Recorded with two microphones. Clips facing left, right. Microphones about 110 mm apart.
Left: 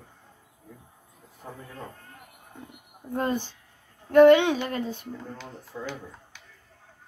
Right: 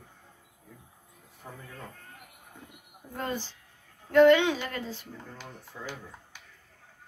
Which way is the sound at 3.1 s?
20° left (ahead or behind).